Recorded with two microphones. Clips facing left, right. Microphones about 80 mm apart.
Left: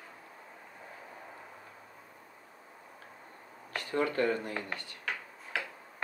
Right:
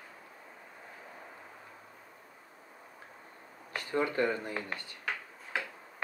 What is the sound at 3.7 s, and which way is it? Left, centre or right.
Speech, right.